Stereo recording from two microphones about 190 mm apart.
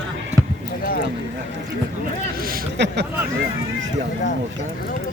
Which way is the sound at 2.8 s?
65° right (ahead or behind).